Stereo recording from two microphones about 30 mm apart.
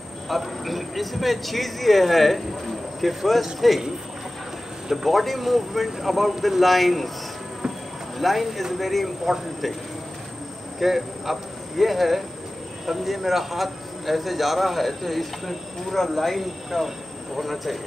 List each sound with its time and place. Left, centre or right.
0.3 s a man's voice: centre
5.1 s a man's voice: centre
8.2 s a man's voice: centre
10.8 s a man's voice: centre